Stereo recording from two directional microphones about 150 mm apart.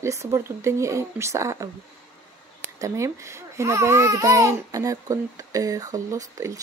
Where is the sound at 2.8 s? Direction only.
20° right (ahead or behind).